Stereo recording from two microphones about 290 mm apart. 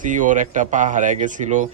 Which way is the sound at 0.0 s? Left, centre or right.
Right.